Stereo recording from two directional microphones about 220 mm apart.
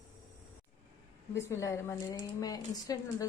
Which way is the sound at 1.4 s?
15° left (ahead or behind).